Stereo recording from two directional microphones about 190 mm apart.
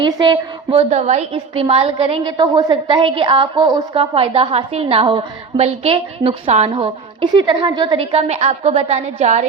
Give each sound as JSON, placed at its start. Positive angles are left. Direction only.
{"t": 0.0, "sound": "a woman's voice", "side_deg": -25}